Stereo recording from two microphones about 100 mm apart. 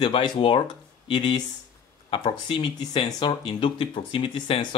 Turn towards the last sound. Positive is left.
turn(degrees=60)  # may be behind; listen again after turning